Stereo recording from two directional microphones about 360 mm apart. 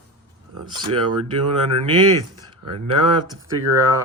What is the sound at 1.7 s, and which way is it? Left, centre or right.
Speech, right.